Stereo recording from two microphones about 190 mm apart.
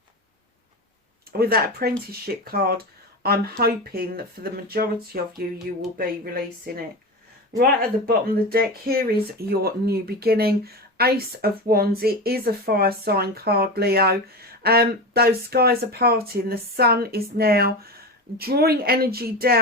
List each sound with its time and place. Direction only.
1.3 s speech: 50° right (ahead or behind)